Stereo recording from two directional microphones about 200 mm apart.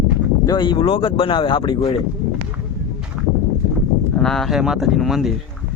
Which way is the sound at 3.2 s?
5° right (ahead or behind).